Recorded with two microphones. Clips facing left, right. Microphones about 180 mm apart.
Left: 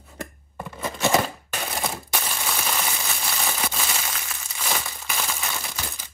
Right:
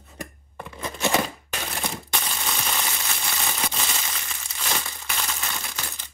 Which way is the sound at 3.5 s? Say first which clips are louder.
Left 1 dB; centre (ahead or behind).